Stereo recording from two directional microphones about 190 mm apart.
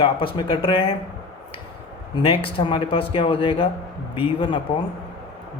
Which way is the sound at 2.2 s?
25° left (ahead or behind).